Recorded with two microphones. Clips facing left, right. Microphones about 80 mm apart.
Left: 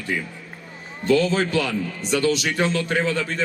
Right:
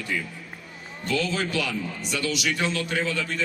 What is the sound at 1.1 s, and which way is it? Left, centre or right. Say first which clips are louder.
A man's voice: left 7 dB; left.